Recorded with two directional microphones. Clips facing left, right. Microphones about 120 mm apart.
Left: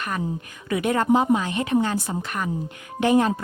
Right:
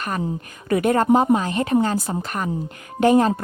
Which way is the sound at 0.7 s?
45° right (ahead or behind).